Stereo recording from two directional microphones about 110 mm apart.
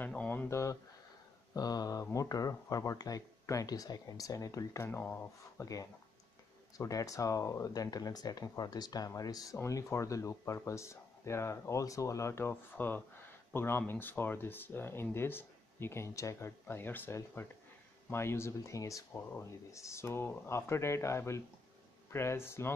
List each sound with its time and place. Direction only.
0.0 s a sound: 15° left (ahead or behind)
0.5 s speech: 25° left (ahead or behind)
6.8 s speech: 30° left (ahead or behind)